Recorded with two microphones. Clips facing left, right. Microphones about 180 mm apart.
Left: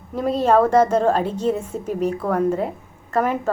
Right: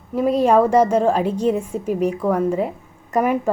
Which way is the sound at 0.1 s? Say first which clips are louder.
Right 2 dB; 10° right (ahead or behind).